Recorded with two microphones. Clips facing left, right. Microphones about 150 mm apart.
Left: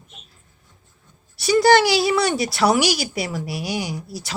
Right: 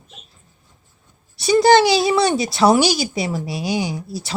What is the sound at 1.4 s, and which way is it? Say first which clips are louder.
Speech: right 2 dB; 25° right (ahead or behind).